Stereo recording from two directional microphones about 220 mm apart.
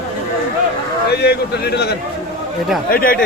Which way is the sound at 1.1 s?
45° left (ahead or behind).